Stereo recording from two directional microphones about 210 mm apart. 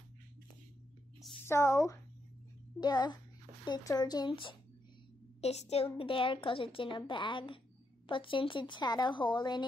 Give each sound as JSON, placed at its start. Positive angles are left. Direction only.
{"t": 1.4, "sound": "a woman's voice", "side_deg": 15}